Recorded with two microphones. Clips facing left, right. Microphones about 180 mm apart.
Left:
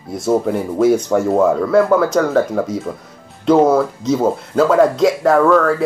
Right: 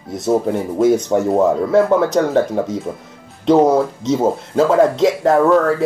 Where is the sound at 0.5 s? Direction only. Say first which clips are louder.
Even; 20° right (ahead or behind).